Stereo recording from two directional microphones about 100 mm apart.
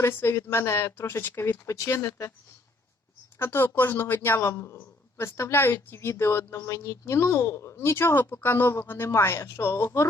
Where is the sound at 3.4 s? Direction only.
25° left (ahead or behind).